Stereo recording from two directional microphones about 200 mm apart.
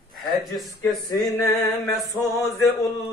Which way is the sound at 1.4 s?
15° left (ahead or behind).